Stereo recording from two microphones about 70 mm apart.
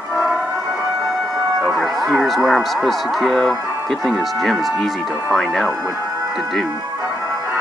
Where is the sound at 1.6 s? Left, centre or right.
Centre.